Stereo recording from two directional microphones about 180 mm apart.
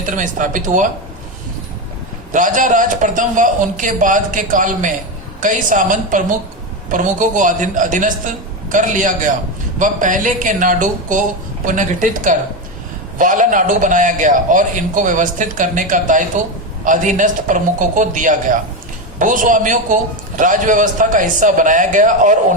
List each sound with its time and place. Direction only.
0.0 s a man's voice: 45° right (ahead or behind)
2.3 s a man's voice: 45° right (ahead or behind)